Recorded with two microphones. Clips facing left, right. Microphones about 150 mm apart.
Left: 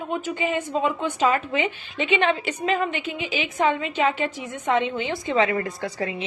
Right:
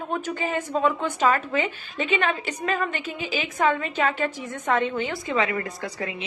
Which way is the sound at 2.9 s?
40° right (ahead or behind).